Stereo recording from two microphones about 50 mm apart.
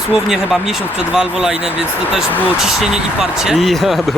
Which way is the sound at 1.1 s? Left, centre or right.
Right.